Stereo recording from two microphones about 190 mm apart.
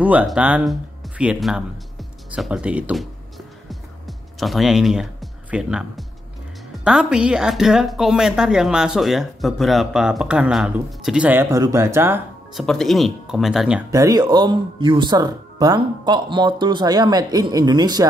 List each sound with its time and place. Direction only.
0.0 s speech: 5° right (ahead or behind)
12.5 s speech: centre (ahead or behind)
13.9 s speech: 20° right (ahead or behind)